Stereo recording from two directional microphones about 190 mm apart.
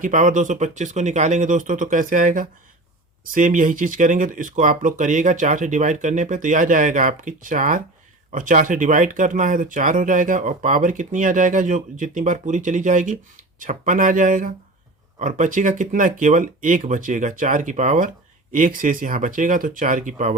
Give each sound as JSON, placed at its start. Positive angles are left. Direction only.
{"t": 0.0, "sound": "speech", "side_deg": -40}